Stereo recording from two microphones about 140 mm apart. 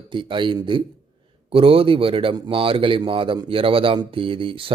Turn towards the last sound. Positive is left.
turn(degrees=-40)  # may be behind; listen again after turning